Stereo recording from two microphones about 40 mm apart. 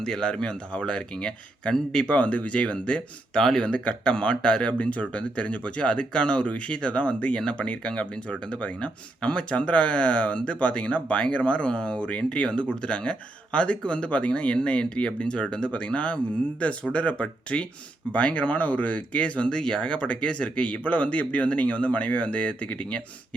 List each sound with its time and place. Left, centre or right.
0.0 s speech: centre
2.0 s speech: left
3.3 s speech: centre; by 23.0 s left